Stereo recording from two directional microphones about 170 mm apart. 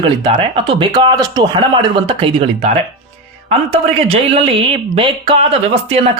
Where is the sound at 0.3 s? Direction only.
30° right (ahead or behind).